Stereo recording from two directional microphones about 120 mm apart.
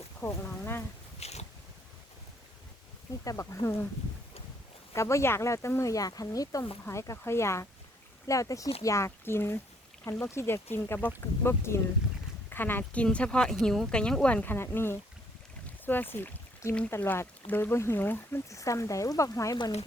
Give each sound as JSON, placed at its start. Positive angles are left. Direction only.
{"t": 0.2, "sound": "speech", "side_deg": 20}
{"t": 1.2, "sound": "boat", "side_deg": 65}
{"t": 3.2, "sound": "speech", "side_deg": 30}
{"t": 4.9, "sound": "speech", "side_deg": 25}
{"t": 15.6, "sound": "boat", "side_deg": 15}
{"t": 16.1, "sound": "speech", "side_deg": 15}